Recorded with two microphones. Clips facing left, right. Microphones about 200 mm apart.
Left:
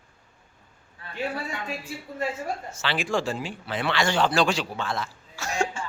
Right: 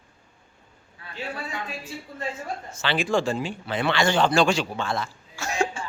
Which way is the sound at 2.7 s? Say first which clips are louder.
Right 4 dB; centre (ahead or behind).